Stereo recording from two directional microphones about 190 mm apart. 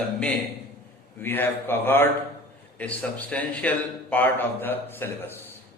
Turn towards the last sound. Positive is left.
turn(degrees=10)  # may be behind; listen again after turning